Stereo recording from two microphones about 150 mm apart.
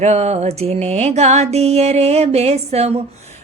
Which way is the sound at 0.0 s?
45° right (ahead or behind).